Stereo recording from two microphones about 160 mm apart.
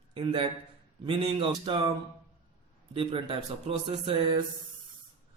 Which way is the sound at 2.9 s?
35° right (ahead or behind).